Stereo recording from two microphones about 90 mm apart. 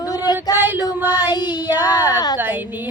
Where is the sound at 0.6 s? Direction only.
25° right (ahead or behind).